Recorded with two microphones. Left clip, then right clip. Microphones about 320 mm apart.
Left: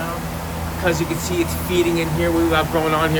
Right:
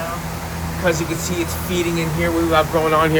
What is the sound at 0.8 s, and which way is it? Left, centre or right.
Speech, centre.